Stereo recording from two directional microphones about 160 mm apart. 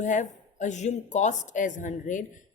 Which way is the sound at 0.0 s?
50° left (ahead or behind).